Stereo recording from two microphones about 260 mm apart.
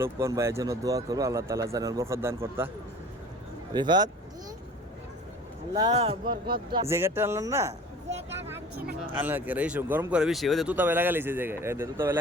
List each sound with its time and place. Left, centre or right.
0.0 s speech: centre
3.7 s speech: centre
5.7 s speech: centre
7.7 s a sound: right
9.1 s speech: centre